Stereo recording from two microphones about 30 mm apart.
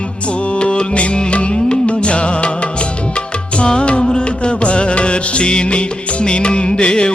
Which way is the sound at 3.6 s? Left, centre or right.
Left.